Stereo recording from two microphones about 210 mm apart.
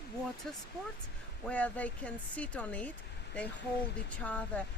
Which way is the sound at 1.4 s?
5° left (ahead or behind).